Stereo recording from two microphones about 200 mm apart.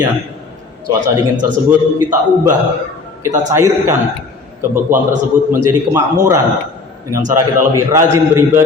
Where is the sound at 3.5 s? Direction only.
15° right (ahead or behind).